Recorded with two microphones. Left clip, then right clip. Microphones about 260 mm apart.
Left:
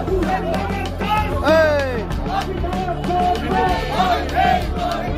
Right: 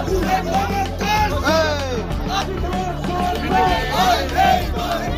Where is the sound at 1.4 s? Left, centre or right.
Left.